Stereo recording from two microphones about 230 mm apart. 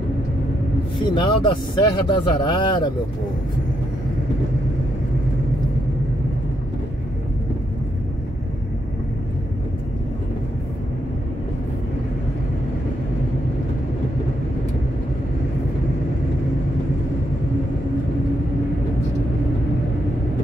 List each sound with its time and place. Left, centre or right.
1.1 s a man's voice: centre